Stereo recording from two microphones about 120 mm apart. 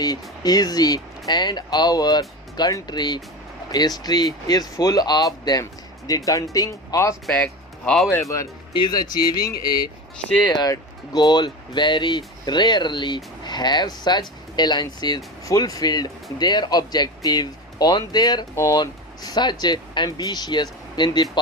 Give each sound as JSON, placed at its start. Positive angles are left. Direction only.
{"t": 0.0, "sound": "speech", "side_deg": 35}
{"t": 7.9, "sound": "speech", "side_deg": 0}
{"t": 8.7, "sound": "speech", "side_deg": 35}